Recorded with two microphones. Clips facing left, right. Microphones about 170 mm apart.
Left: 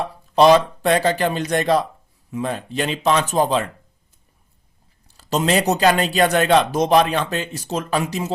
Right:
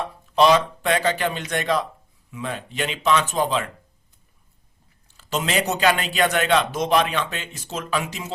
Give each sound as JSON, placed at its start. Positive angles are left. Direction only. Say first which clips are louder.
{"t": 0.0, "sound": "a man's voice", "louder": "left 4 dB", "side_deg": 35}
{"t": 5.0, "sound": "a man's voice", "louder": "left 6 dB", "side_deg": 35}